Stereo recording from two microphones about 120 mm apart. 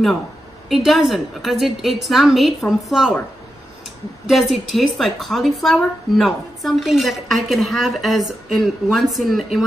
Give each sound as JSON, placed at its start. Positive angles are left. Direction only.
{"t": 0.7, "sound": "a woman's voice", "side_deg": 0}
{"t": 4.3, "sound": "a woman's voice", "side_deg": 0}